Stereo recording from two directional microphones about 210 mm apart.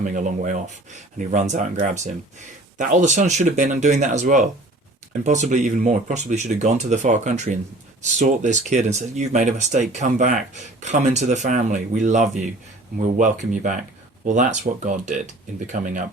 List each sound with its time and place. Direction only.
0.0 s speech: 35° right (ahead or behind)